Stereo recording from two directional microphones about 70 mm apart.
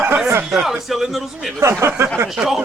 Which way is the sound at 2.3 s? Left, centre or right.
Centre.